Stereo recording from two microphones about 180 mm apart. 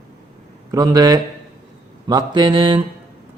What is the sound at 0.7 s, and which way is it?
Speech, 20° right (ahead or behind).